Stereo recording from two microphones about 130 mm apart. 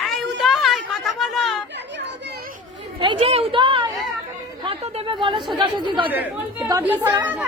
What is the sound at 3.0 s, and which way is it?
Speech, 45° right (ahead or behind).